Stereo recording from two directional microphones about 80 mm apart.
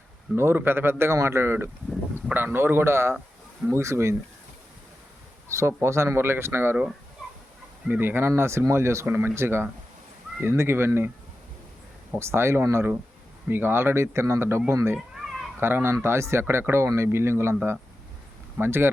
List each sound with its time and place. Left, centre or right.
0.3 s speech: right
5.5 s speech: right
7.9 s speech: right
12.2 s speech: right
14.9 s a sound: centre
15.6 s speech: right